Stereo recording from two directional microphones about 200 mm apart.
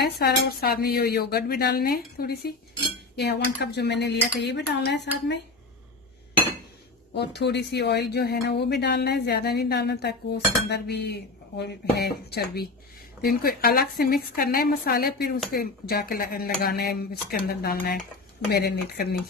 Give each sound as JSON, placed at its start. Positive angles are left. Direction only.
{"t": 0.0, "sound": "a woman's voice", "side_deg": 55}
{"t": 7.2, "sound": "a woman's voice", "side_deg": 55}